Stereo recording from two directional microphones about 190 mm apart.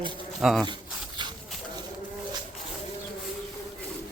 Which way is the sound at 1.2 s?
25° right (ahead or behind).